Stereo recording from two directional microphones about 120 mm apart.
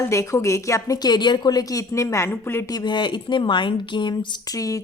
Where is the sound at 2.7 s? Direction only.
40° left (ahead or behind).